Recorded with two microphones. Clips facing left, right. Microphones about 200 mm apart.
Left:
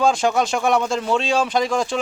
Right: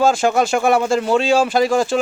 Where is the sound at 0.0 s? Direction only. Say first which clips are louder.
Right 3 dB; 5° right (ahead or behind).